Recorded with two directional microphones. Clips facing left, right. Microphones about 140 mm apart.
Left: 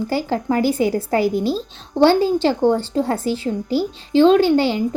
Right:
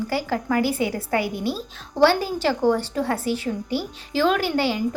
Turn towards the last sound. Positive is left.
turn(degrees=25)  # may be behind; listen again after turning